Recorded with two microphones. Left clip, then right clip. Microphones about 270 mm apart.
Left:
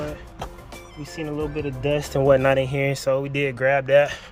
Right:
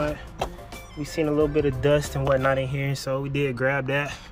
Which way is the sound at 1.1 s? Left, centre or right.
Centre.